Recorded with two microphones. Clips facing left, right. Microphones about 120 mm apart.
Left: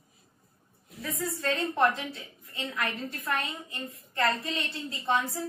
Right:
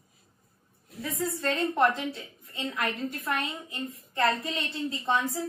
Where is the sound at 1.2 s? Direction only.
25° right (ahead or behind).